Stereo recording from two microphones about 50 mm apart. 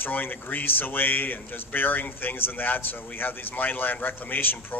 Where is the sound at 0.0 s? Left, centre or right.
Left.